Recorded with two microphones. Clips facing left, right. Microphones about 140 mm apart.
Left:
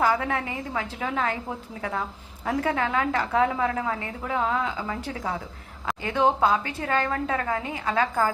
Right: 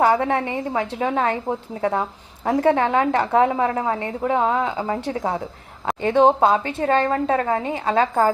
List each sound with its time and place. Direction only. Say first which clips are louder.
0.0 s a woman's voice: right 6 dB; 30° right (ahead or behind)